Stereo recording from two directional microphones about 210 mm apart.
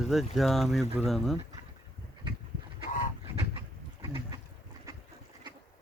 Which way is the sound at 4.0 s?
25° right (ahead or behind).